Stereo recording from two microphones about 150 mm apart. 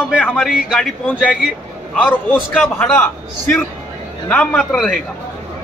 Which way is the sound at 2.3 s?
5° left (ahead or behind).